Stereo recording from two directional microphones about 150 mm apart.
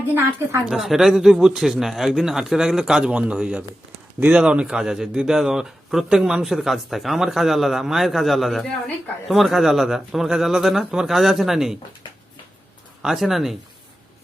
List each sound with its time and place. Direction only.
0.1 s a woman's voice: 15° right (ahead or behind)
0.7 s a man's voice: centre (ahead or behind)
13.0 s a man's voice: centre (ahead or behind)